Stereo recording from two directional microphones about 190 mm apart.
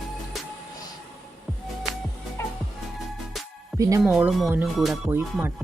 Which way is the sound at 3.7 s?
15° right (ahead or behind).